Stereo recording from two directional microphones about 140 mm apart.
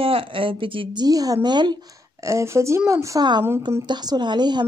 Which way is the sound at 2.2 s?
20° right (ahead or behind).